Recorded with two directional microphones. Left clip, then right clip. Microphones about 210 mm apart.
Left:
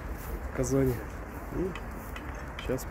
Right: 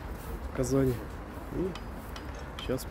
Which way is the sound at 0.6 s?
Centre (ahead or behind).